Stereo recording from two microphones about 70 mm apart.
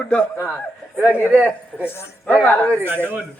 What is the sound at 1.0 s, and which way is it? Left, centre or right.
Speech, right.